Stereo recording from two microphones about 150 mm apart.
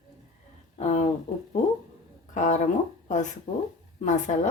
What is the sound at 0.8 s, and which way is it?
Speech, 50° left (ahead or behind).